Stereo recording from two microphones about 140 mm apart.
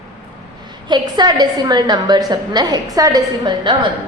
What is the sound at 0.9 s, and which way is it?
A woman's voice, 30° right (ahead or behind).